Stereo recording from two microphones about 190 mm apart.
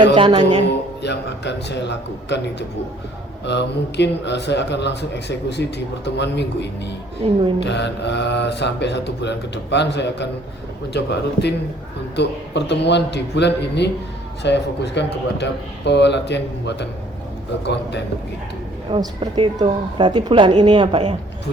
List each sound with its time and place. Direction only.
0.1 s a woman's voice: 25° right (ahead or behind)
1.0 s a man's voice: 65° left (ahead or behind)
7.2 s a woman's voice: 30° right (ahead or behind)
7.6 s a man's voice: 65° left (ahead or behind)
18.9 s a woman's voice: 30° right (ahead or behind)